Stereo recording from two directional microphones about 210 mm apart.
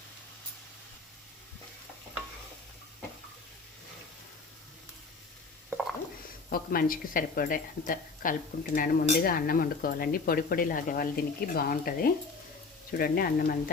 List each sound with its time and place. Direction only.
6.5 s speech: 45° left (ahead or behind)